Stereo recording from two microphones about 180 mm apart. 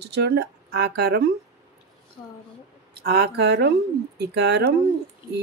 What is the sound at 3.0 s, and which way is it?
Speech, 60° right (ahead or behind).